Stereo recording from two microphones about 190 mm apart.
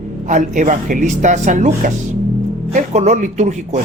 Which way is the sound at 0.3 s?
40° right (ahead or behind).